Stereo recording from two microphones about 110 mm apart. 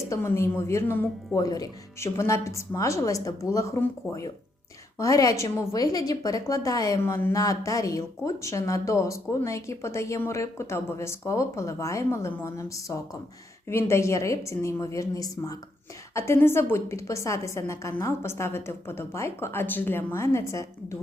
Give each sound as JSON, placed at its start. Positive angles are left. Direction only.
{"t": 0.1, "sound": "a woman's voice", "side_deg": 25}
{"t": 4.9, "sound": "a woman's voice", "side_deg": 30}